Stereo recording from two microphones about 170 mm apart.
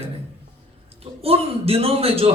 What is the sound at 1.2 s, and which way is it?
A man's voice, 35° right (ahead or behind).